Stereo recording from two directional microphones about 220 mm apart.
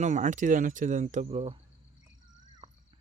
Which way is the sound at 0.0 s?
35° right (ahead or behind).